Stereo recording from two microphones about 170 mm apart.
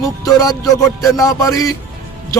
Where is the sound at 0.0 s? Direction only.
20° left (ahead or behind).